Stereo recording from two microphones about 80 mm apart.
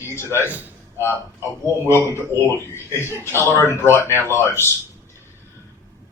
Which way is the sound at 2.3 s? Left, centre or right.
Left.